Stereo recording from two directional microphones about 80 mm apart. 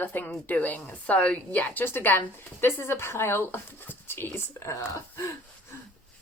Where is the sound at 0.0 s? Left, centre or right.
Left.